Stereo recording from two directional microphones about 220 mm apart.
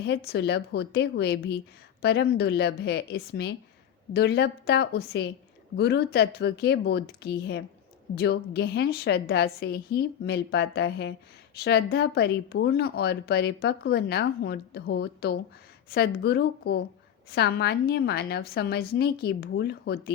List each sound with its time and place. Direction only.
0.0 s speech: 50° left (ahead or behind)